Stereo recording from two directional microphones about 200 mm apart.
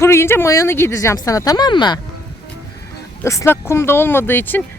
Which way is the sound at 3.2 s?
15° left (ahead or behind).